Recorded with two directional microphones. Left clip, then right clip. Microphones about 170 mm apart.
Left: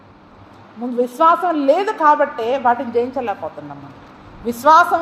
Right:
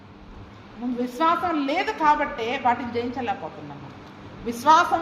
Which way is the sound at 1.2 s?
50° left (ahead or behind).